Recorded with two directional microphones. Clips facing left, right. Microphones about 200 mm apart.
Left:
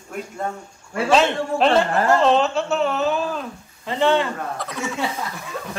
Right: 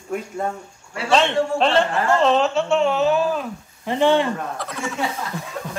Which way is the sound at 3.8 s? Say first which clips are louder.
Right 2 dB; 15° right (ahead or behind).